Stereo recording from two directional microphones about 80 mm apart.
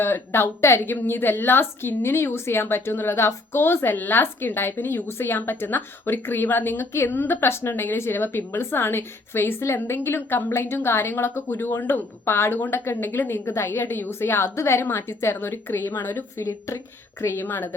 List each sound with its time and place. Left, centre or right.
0.0 s a woman's voice: left